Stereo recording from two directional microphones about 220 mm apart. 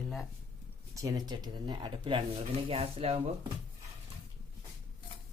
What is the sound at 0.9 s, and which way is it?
Speech, 15° right (ahead or behind).